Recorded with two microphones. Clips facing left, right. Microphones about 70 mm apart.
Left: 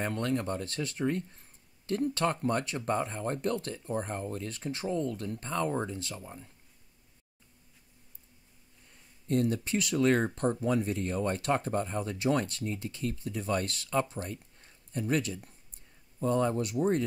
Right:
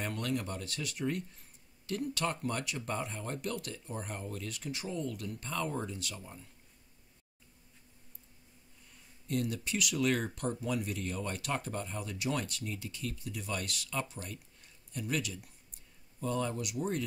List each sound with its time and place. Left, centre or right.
0.0 s speech: left
9.3 s speech: left